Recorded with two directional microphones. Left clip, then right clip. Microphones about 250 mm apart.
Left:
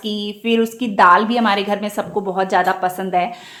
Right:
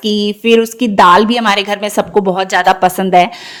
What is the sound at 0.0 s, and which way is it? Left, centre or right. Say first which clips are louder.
A woman's voice: right 9 dB; right.